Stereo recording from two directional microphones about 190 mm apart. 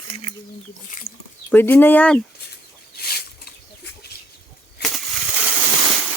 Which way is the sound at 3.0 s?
55° left (ahead or behind).